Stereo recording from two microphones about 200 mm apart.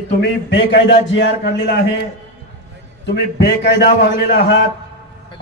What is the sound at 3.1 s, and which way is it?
Speech, 55° left (ahead or behind).